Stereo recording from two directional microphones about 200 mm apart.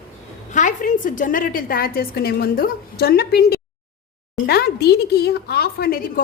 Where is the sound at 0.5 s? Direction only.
40° left (ahead or behind).